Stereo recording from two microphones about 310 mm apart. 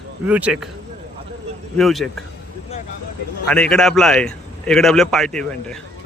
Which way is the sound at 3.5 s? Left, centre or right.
Centre.